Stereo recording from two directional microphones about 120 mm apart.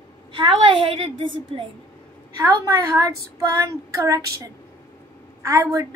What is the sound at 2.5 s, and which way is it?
Speech, 30° right (ahead or behind).